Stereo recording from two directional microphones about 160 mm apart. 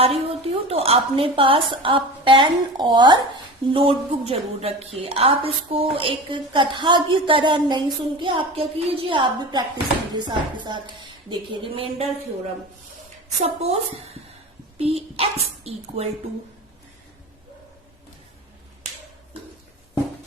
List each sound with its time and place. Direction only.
0.0 s a woman's voice: 40° right (ahead or behind)
10.2 s chopping: 30° right (ahead or behind)
11.3 s a woman's voice: 30° right (ahead or behind)
13.4 s a woman's voice: 40° right (ahead or behind)